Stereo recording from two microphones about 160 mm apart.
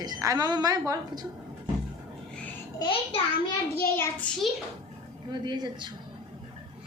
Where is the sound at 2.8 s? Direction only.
35° left (ahead or behind).